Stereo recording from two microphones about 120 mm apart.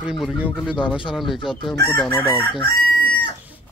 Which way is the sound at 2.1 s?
45° left (ahead or behind).